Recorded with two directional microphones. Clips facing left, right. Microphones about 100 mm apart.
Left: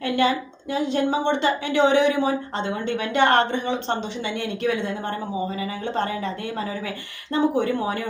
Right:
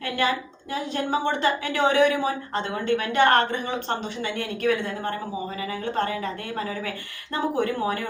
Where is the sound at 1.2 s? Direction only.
25° left (ahead or behind).